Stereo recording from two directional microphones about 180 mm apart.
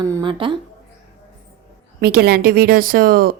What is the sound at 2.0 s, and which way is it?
Speech, 60° right (ahead or behind).